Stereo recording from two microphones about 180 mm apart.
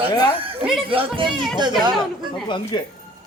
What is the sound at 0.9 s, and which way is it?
Speech, 30° right (ahead or behind).